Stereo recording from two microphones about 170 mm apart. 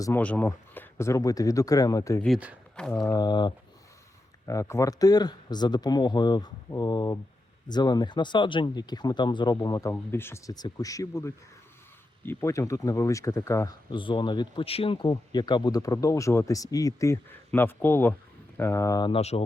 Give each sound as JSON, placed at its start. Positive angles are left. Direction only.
{"t": 0.0, "sound": "speech", "side_deg": 10}
{"t": 2.2, "sound": "speech", "side_deg": -5}
{"t": 2.7, "sound": "mantra", "side_deg": 5}
{"t": 3.1, "sound": "speech", "side_deg": 25}
{"t": 13.9, "sound": "speech", "side_deg": 30}
{"t": 19.1, "sound": "speech", "side_deg": 40}